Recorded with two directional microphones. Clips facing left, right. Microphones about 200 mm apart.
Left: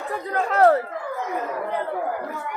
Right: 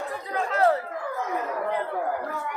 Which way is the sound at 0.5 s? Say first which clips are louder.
Left 5 dB; 60° left (ahead or behind).